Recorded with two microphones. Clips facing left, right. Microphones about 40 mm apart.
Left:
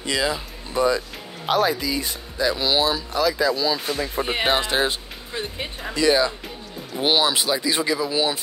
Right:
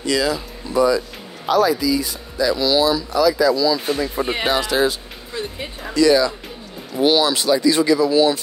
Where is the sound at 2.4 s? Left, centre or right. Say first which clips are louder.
Right 4 dB; left.